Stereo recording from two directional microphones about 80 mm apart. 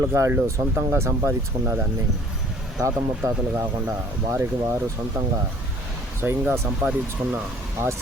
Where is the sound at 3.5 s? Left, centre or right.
Right.